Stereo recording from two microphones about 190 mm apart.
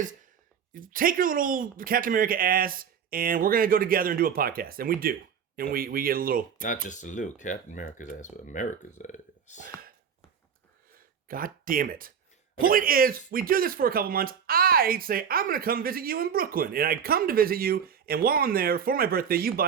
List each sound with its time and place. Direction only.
0.7 s speech: 45° right (ahead or behind)
6.8 s speech: 40° left (ahead or behind)
11.3 s speech: 50° right (ahead or behind)